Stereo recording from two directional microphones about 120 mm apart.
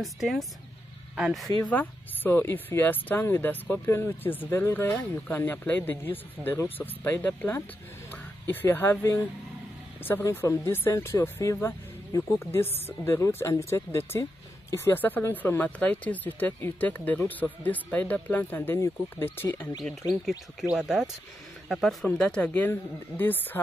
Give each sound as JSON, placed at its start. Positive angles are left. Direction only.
{"t": 0.0, "sound": "speech", "side_deg": 0}
{"t": 1.7, "sound": "speech", "side_deg": 15}
{"t": 20.7, "sound": "speech", "side_deg": -5}